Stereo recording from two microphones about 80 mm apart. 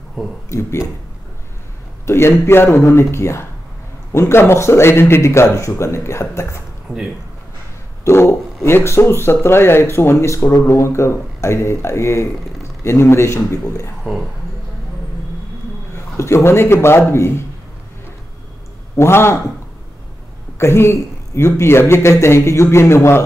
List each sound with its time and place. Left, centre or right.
0.5 s a man's voice: left
2.0 s a man's voice: left
8.0 s a sound: left
8.6 s a man's voice: left
15.9 s a man's voice: left
18.9 s a man's voice: left
20.5 s a man's voice: left